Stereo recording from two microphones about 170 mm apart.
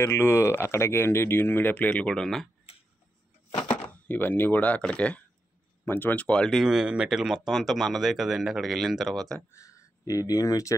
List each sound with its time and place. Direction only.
0.0 s speech: 15° left (ahead or behind)
3.7 s speech: 10° left (ahead or behind)
9.5 s speech: 20° left (ahead or behind)